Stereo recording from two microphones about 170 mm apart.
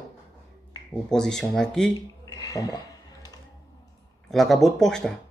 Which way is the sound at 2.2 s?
20° left (ahead or behind).